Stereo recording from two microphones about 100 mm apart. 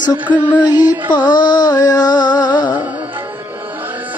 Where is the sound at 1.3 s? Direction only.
45° left (ahead or behind).